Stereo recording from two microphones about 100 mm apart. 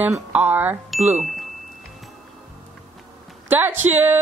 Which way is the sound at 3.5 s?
20° right (ahead or behind).